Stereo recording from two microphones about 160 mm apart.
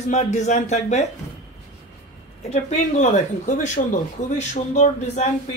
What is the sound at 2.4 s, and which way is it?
Speech, 45° left (ahead or behind).